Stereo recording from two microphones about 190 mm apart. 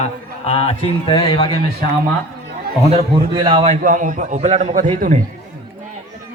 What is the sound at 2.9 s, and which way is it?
Speech, 30° right (ahead or behind).